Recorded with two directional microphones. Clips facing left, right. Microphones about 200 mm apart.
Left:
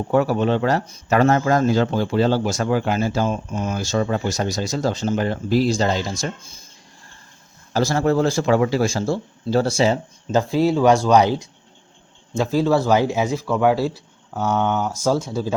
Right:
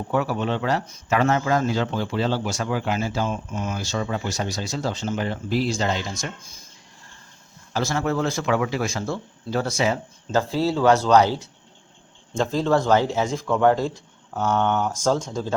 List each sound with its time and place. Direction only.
0.1 s speech: 40° left (ahead or behind)
7.7 s speech: 35° left (ahead or behind)
10.3 s speech: 15° left (ahead or behind)